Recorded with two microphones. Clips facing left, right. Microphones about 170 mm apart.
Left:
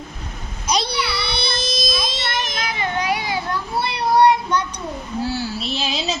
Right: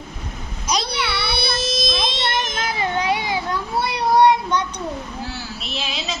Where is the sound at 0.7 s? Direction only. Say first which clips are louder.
Left 1 dB; centre (ahead or behind).